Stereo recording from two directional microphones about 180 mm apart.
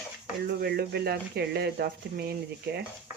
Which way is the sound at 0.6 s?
60° right (ahead or behind).